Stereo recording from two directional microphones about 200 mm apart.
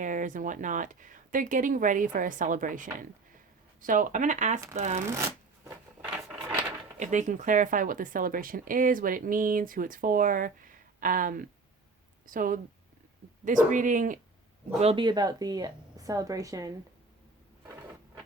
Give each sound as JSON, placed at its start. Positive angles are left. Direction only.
{"t": 0.0, "sound": "speech", "side_deg": -40}
{"t": 5.0, "sound": "shuffling cards", "side_deg": -15}
{"t": 7.0, "sound": "speech", "side_deg": -40}
{"t": 14.8, "sound": "a woman's voice", "side_deg": -25}